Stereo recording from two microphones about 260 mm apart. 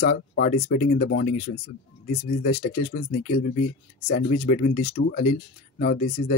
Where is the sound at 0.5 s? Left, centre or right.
Left.